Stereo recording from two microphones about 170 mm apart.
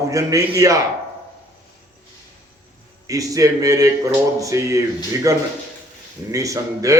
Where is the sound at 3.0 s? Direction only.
20° right (ahead or behind).